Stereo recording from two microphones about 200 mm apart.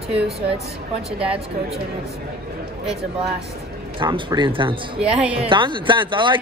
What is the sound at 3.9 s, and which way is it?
Speech, 25° right (ahead or behind).